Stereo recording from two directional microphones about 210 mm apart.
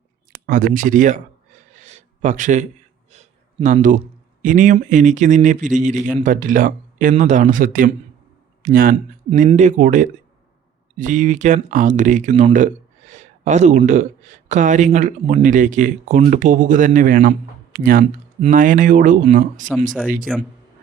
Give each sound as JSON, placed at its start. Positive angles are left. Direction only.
{"t": 0.4, "sound": "speech", "side_deg": -40}
{"t": 1.8, "sound": "a sound", "side_deg": -35}
{"t": 4.4, "sound": "speech", "side_deg": -35}